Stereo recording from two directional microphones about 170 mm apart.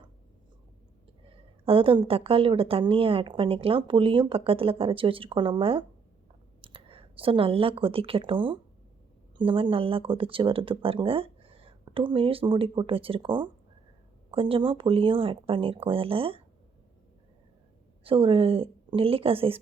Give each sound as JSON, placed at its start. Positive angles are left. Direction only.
{"t": 1.3, "sound": "a woman's voice", "side_deg": -35}
{"t": 18.0, "sound": "a woman's voice", "side_deg": -30}